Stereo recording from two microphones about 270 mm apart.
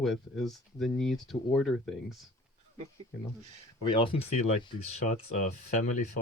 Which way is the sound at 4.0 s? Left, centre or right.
Left.